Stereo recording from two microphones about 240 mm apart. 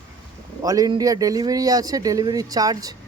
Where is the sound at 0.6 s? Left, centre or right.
Centre.